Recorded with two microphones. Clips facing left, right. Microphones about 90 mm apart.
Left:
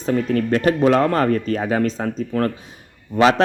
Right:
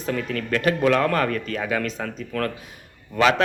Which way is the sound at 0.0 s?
35° left (ahead or behind).